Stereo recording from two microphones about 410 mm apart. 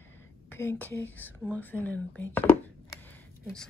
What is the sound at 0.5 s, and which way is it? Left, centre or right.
Speech, centre.